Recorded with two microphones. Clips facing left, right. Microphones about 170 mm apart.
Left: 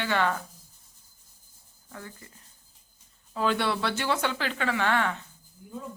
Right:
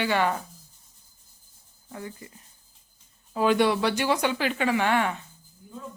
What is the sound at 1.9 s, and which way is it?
Speech, 15° right (ahead or behind).